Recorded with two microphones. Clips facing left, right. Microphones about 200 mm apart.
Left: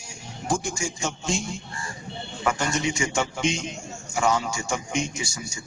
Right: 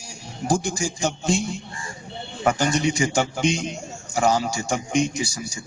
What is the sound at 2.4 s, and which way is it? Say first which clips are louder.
Speech: right 5 dB; 35° right (ahead or behind).